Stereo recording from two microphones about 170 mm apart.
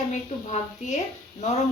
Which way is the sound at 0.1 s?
45° left (ahead or behind).